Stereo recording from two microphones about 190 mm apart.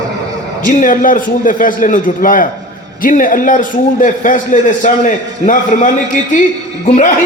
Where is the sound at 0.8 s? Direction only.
45° left (ahead or behind).